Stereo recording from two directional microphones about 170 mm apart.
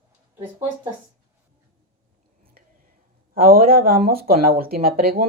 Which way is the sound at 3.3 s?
60° right (ahead or behind).